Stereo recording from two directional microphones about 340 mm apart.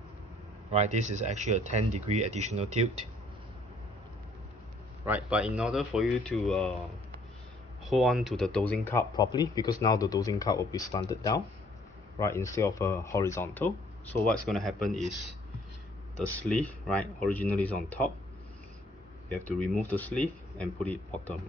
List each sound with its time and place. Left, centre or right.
0.7 s speech: centre
5.0 s speech: centre
7.8 s speech: centre
16.3 s speech: centre
19.2 s speech: centre